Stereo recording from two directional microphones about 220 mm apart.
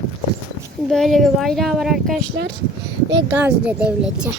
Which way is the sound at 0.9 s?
Centre (ahead or behind).